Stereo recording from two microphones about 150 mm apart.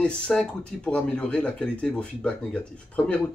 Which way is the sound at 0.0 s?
5° left (ahead or behind).